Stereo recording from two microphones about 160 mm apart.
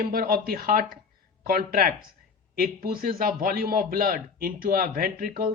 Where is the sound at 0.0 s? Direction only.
65° right (ahead or behind).